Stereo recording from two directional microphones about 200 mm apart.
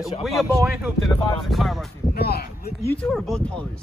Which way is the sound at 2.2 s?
50° left (ahead or behind).